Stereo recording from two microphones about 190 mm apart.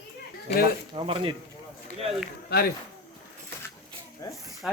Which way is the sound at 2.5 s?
55° left (ahead or behind).